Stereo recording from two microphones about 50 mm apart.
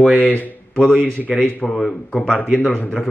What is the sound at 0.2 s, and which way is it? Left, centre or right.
Speech, left.